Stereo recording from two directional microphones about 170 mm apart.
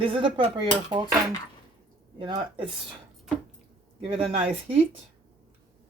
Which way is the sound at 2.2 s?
30° right (ahead or behind).